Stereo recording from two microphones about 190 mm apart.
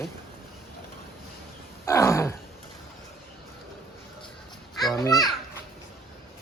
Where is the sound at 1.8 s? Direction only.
15° left (ahead or behind).